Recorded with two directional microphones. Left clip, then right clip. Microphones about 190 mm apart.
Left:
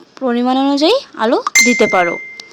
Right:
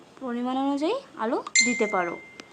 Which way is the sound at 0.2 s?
45° left (ahead or behind).